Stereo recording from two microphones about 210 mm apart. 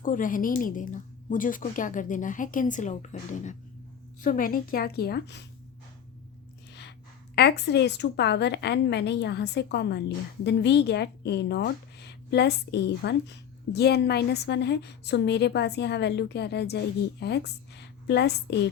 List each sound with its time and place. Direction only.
0.0 s a woman's voice: 40° left (ahead or behind)
7.3 s speech: 50° left (ahead or behind)